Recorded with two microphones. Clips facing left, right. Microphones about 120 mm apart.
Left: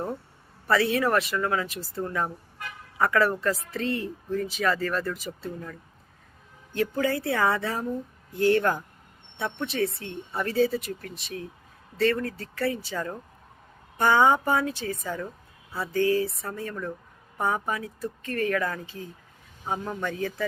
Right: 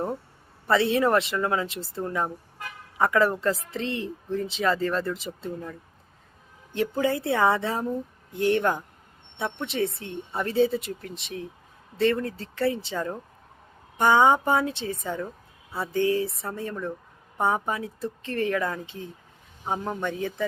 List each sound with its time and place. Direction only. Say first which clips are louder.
0.7 s a woman's voice: right 2 dB; 25° right (ahead or behind)
6.7 s a woman's voice: right 1 dB; 25° right (ahead or behind)